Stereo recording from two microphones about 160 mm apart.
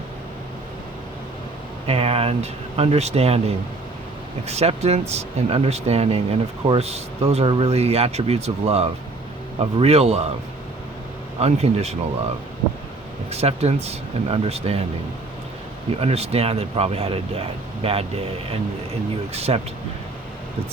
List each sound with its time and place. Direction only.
1.9 s speech: 40° right (ahead or behind)
11.3 s speech: 40° right (ahead or behind)
13.3 s speech: 40° right (ahead or behind)
15.9 s speech: 40° right (ahead or behind)